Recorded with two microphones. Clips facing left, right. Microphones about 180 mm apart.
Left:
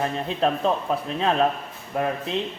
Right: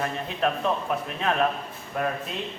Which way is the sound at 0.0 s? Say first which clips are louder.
Left 3 dB; 30° left (ahead or behind).